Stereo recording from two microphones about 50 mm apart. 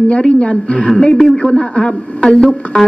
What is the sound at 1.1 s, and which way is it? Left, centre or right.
Music, centre.